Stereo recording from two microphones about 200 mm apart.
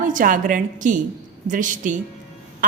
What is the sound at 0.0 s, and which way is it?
A woman's voice, 40° right (ahead or behind).